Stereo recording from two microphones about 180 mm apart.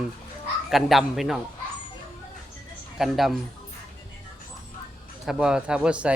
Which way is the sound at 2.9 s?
Centre (ahead or behind).